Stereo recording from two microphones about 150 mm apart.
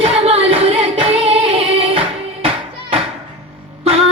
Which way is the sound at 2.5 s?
40° right (ahead or behind).